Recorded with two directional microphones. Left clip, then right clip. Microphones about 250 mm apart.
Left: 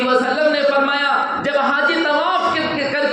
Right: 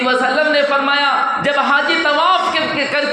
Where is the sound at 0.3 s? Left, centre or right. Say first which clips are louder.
Right 1 dB; right.